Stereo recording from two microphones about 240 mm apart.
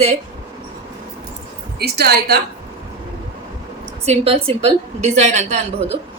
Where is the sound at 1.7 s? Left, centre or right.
Right.